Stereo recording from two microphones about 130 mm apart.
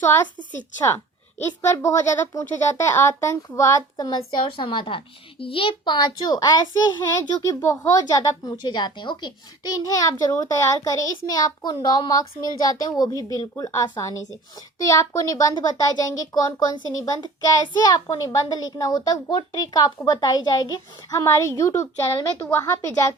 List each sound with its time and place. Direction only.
0.9 s a woman's voice: 20° left (ahead or behind)